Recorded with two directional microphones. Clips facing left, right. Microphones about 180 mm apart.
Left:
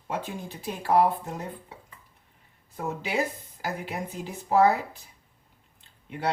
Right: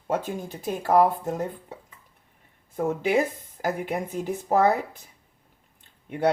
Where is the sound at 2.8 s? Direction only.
50° right (ahead or behind).